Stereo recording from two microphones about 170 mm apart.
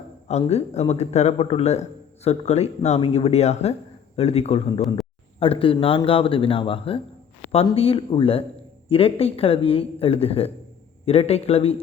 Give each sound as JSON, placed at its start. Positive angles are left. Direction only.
{"t": 0.3, "sound": "a man's voice", "side_deg": 40}